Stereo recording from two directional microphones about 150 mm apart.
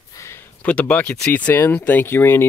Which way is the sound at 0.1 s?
20° left (ahead or behind).